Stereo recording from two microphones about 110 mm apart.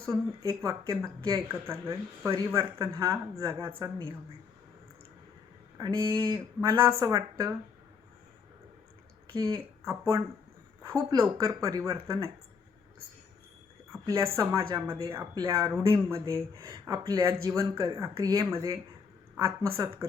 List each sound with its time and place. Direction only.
0.0 s speech: 30° right (ahead or behind)
5.7 s a sound: 35° right (ahead or behind)
6.8 s speech: 30° right (ahead or behind)
9.3 s speech: 35° right (ahead or behind)
13.9 s a sound: 25° right (ahead or behind)
14.3 s speech: 30° right (ahead or behind)